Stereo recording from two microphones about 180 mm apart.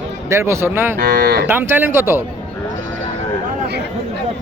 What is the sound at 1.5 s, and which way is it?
Speech, 10° right (ahead or behind).